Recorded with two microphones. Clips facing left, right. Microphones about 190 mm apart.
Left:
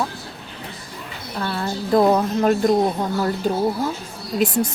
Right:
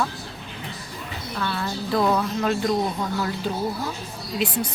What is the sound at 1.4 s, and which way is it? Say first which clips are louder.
A woman's voice: left 3 dB; 35° left (ahead or behind).